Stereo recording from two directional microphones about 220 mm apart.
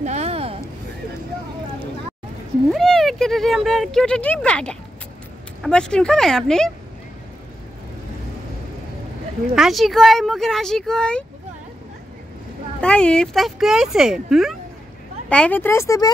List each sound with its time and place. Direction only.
0.0 s a sound: 30° right (ahead or behind)
2.7 s speech: centre (ahead or behind)
9.6 s speech: centre (ahead or behind)
12.8 s speech: 5° left (ahead or behind)